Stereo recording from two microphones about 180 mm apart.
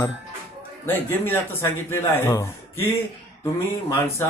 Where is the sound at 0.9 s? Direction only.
10° left (ahead or behind).